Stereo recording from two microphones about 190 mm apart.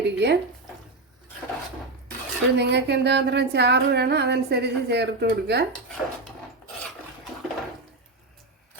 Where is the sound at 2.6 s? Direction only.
60° right (ahead or behind).